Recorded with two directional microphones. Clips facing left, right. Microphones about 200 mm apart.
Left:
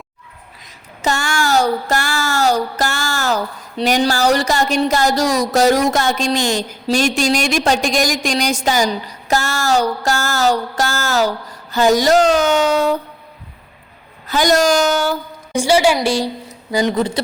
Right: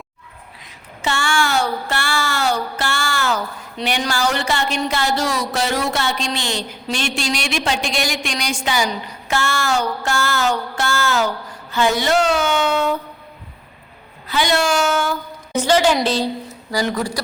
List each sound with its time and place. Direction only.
1.0 s a sound: 40° left (ahead or behind)
6.8 s a woman's voice: 40° left (ahead or behind)
14.3 s a woman's voice: 45° left (ahead or behind)
15.1 s a woman's voice: 10° left (ahead or behind)